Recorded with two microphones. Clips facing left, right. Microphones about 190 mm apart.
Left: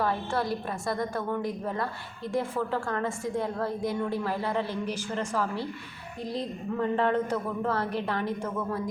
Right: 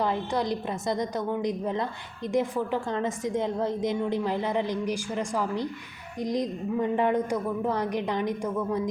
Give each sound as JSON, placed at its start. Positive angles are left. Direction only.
{"t": 0.0, "sound": "a woman's voice", "side_deg": -20}